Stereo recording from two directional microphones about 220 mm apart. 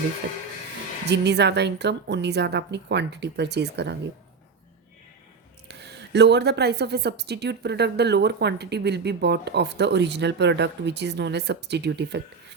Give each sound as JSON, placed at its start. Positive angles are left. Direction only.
{"t": 1.1, "sound": "a woman's voice", "side_deg": -50}
{"t": 5.6, "sound": "a woman's voice", "side_deg": -50}